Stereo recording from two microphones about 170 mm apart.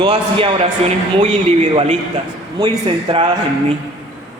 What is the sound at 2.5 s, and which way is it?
Speech, 30° right (ahead or behind).